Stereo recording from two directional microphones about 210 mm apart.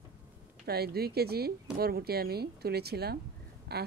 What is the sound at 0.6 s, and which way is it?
Speech, 50° right (ahead or behind).